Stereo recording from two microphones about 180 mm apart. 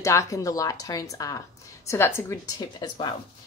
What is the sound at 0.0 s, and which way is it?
Speech, 15° left (ahead or behind).